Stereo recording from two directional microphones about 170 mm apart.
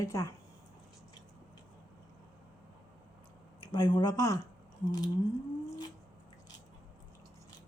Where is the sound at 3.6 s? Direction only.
25° left (ahead or behind).